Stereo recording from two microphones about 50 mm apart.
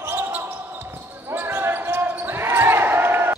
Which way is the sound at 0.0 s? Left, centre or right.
Right.